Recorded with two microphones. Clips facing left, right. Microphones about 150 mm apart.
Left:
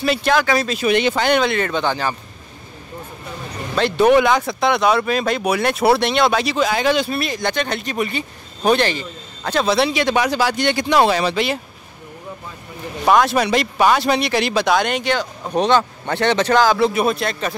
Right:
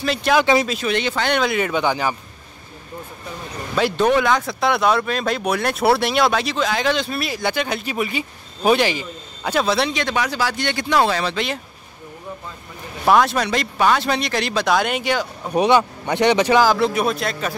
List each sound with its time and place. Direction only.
0.0 s speech: 5° left (ahead or behind)
0.4 s speech: 20° right (ahead or behind)
0.8 s speech: 15° left (ahead or behind)
1.3 s speech: 5° right (ahead or behind)
3.9 s speech: 10° left (ahead or behind)
10.1 s speech: 20° left (ahead or behind)
13.0 s speech: centre (ahead or behind)